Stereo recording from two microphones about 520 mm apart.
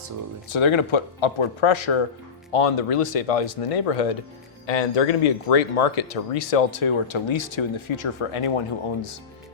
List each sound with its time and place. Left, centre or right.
0.5 s speech: left
2.5 s speech: left
5.2 s speech: left